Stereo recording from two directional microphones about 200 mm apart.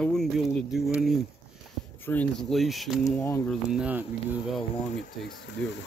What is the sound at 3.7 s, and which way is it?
Speech, 5° right (ahead or behind).